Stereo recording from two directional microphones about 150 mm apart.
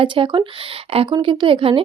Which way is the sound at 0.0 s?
35° right (ahead or behind).